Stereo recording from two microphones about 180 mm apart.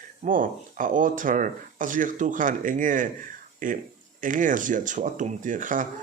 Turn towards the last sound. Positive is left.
turn(degrees=-45)  # may be behind; listen again after turning